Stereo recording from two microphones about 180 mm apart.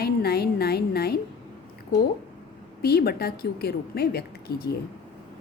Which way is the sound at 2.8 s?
60° left (ahead or behind).